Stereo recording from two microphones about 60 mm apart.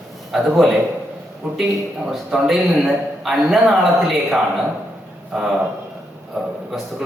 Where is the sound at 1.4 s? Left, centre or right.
Centre.